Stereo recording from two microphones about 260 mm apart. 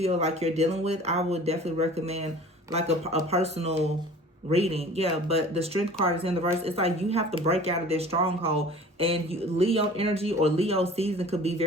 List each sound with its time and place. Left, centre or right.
0.0 s speech: right